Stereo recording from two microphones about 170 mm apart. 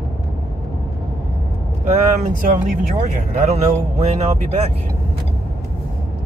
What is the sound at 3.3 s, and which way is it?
Speech, 40° right (ahead or behind).